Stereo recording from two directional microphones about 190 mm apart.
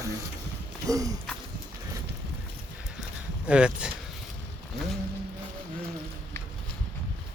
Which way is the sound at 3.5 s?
5° right (ahead or behind).